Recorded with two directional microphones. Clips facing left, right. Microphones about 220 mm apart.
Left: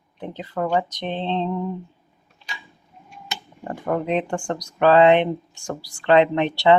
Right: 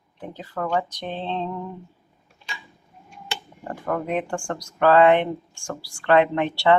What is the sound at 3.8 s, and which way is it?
Speech, 20° left (ahead or behind).